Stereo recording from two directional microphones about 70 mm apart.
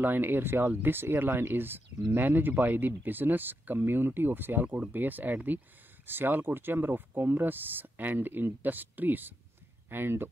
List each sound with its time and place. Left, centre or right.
0.0 s speech: right